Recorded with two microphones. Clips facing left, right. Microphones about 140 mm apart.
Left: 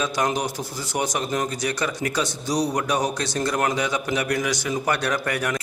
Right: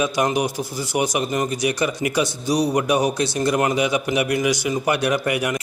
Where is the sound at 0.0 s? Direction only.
5° right (ahead or behind).